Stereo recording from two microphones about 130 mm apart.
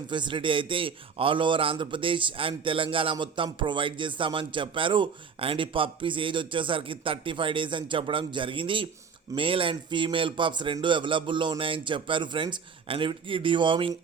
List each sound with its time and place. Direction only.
0.1 s a man's voice: 35° right (ahead or behind)